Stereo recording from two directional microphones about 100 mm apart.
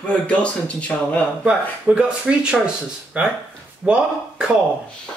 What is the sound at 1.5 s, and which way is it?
Speech, 10° right (ahead or behind).